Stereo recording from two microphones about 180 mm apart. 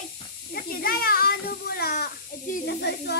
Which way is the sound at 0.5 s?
55° left (ahead or behind).